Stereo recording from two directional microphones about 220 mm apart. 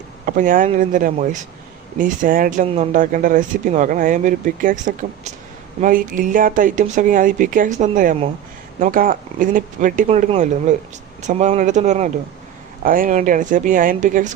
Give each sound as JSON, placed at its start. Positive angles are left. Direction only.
{"t": 0.3, "sound": "speech", "side_deg": -40}